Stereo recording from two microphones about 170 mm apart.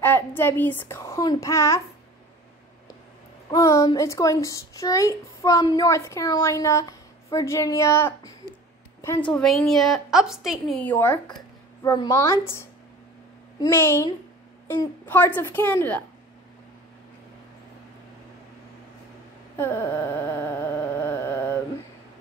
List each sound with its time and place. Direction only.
0.0 s a child's voice: 10° left (ahead or behind)
3.4 s a woman's voice: 20° left (ahead or behind)
9.3 s a woman's voice: 5° left (ahead or behind)
10.8 s a woman's voice: 10° left (ahead or behind)
11.8 s a woman's voice: 25° left (ahead or behind)
19.6 s music: 10° left (ahead or behind)